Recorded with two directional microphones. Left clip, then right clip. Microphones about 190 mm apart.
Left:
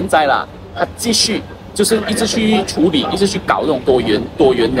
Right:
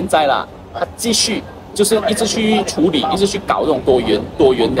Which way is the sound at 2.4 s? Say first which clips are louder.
Even; 55° right (ahead or behind).